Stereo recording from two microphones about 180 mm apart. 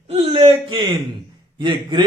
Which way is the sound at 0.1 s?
35° right (ahead or behind).